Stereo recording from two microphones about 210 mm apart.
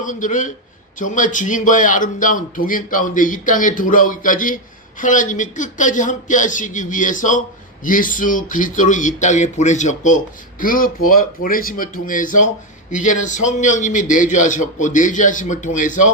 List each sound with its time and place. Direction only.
0.0 s a man's voice: 35° left (ahead or behind)